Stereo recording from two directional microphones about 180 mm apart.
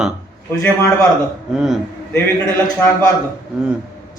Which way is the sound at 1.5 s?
5° right (ahead or behind).